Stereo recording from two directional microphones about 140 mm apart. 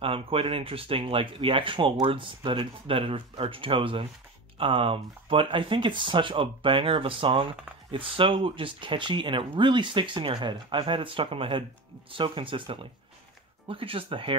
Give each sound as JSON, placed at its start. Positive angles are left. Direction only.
{"t": 0.0, "sound": "speech", "side_deg": -40}